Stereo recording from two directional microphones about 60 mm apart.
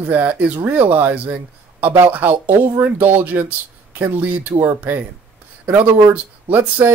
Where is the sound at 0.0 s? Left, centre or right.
Right.